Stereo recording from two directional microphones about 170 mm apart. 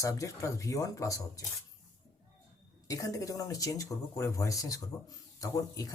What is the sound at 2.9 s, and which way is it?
Speech, 20° left (ahead or behind).